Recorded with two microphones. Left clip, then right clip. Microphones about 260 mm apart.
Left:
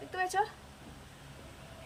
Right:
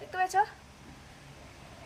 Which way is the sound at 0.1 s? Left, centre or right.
Right.